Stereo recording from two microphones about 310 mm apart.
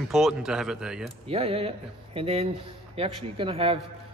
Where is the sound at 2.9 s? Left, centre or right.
Centre.